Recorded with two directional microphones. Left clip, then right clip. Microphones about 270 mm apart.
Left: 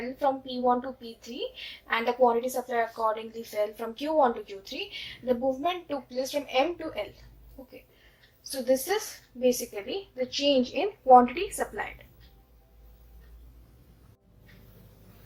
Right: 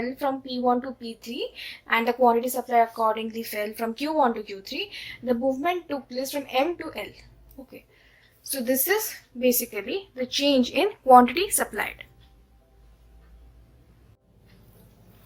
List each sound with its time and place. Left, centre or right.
0.2 s a woman's voice: right
1.9 s a woman's voice: right